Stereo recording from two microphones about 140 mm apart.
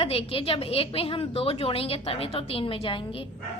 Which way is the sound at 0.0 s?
45° left (ahead or behind).